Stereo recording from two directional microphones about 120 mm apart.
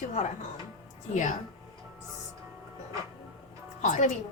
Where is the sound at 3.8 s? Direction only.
90° left.